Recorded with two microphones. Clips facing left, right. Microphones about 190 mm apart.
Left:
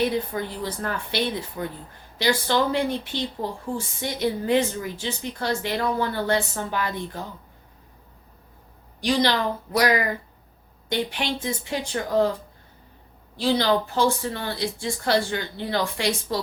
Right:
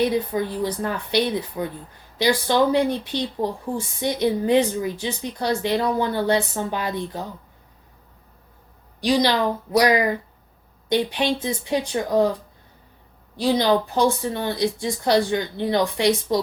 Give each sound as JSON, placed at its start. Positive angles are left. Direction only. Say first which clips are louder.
{"t": 0.3, "sound": "a woman's voice", "louder": "right 5 dB", "side_deg": -15}
{"t": 9.0, "sound": "a woman's voice", "louder": "right 3 dB", "side_deg": -15}
{"t": 13.4, "sound": "a woman's voice", "louder": "right 2 dB", "side_deg": -15}